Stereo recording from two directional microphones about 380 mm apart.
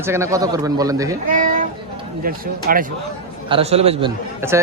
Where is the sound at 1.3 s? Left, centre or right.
Right.